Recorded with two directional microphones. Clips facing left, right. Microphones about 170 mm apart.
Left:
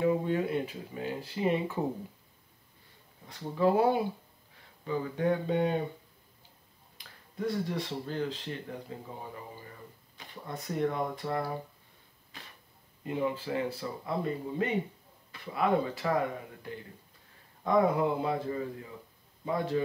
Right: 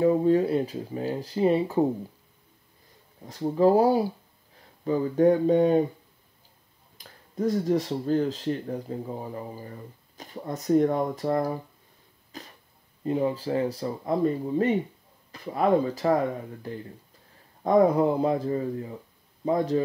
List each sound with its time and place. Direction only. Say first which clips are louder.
0.0 s speech: right 7 dB; 35° right (ahead or behind)
3.3 s speech: right 7 dB; 40° right (ahead or behind)
7.0 s speech: right 7 dB; 40° right (ahead or behind)
12.3 s cough: right 9 dB; 40° right (ahead or behind)
13.0 s speech: right 6 dB; 35° right (ahead or behind)
17.6 s speech: right 6 dB; 40° right (ahead or behind)